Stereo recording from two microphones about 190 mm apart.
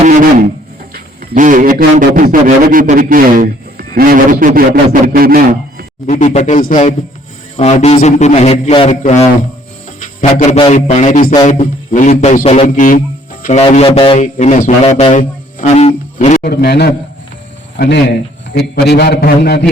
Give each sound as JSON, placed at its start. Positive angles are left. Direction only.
{"t": 0.0, "sound": "a sound", "side_deg": -45}
{"t": 1.3, "sound": "a man's voice", "side_deg": -45}
{"t": 6.1, "sound": "a man's voice", "side_deg": 40}
{"t": 10.0, "sound": "music", "side_deg": 40}
{"t": 10.6, "sound": "a man's voice", "side_deg": 35}
{"t": 15.2, "sound": "music", "side_deg": 45}
{"t": 15.7, "sound": "music", "side_deg": 30}
{"t": 16.4, "sound": "a man's voice", "side_deg": 55}